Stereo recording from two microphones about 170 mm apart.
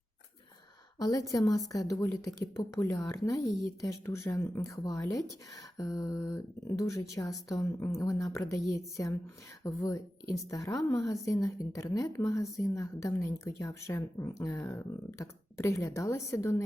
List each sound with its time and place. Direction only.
0.9 s a woman's voice: 20° left (ahead or behind)